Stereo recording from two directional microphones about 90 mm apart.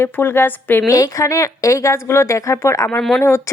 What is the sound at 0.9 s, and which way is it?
A woman's voice, 35° left (ahead or behind).